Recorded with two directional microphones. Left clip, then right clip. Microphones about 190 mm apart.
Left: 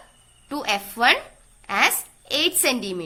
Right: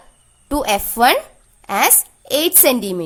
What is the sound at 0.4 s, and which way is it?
A woman's voice, 65° right (ahead or behind).